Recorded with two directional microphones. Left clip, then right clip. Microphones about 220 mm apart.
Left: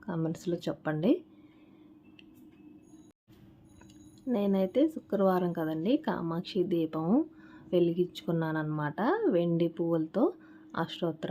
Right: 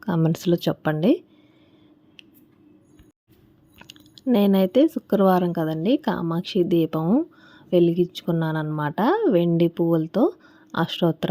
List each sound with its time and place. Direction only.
0.0 s speech: 35° right (ahead or behind)
3.8 s speech: 40° right (ahead or behind)